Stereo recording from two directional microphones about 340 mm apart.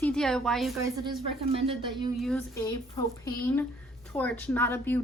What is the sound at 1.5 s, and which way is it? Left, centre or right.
Speech, centre.